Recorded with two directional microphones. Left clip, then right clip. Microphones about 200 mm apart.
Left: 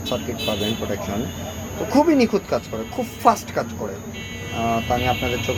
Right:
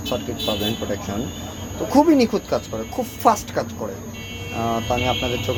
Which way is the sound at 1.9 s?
5° left (ahead or behind).